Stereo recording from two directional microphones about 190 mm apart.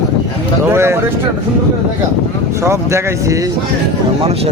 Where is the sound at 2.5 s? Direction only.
15° right (ahead or behind).